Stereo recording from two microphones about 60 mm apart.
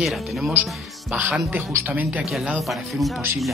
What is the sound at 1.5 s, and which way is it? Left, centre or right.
Speech, right.